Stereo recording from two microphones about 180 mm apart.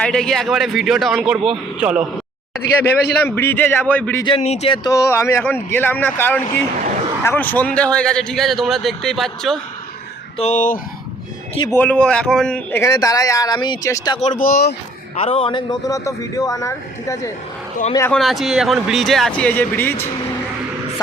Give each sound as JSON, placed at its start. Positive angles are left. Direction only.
{"t": 0.0, "sound": "speech", "side_deg": 5}
{"t": 2.7, "sound": "speech", "side_deg": 10}
{"t": 4.4, "sound": "speech", "side_deg": 35}
{"t": 4.8, "sound": "speech", "side_deg": 15}
{"t": 10.3, "sound": "speech", "side_deg": 40}
{"t": 11.7, "sound": "a man's voice", "side_deg": 10}
{"t": 14.2, "sound": "speech", "side_deg": 45}
{"t": 15.1, "sound": "a man's voice", "side_deg": 35}
{"t": 18.1, "sound": "speech", "side_deg": 0}